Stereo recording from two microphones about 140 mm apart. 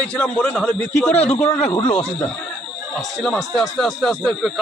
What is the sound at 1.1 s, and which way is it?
Speech, 50° left (ahead or behind).